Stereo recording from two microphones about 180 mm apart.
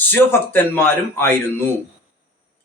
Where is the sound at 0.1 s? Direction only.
10° left (ahead or behind).